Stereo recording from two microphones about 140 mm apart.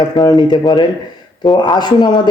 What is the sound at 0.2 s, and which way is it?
Speech, 30° left (ahead or behind).